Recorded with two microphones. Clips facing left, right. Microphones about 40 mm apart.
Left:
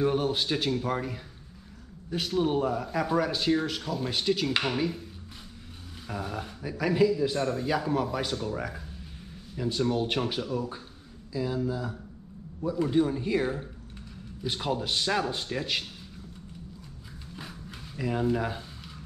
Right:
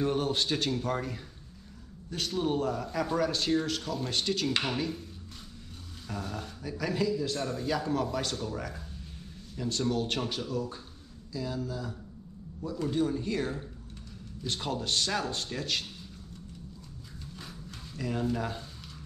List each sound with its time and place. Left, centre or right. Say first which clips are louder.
0.0 s speech: left 2 dB; centre
6.0 s speech: left 3 dB; centre
17.4 s a sound: left 5 dB; centre